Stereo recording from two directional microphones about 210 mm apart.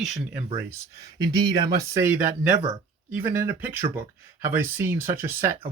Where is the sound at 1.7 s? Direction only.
15° right (ahead or behind).